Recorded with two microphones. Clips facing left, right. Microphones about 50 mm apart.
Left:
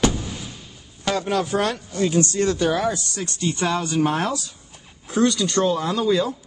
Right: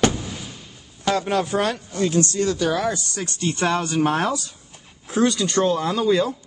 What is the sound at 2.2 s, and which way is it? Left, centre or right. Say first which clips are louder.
Speech: left 1 dB; left.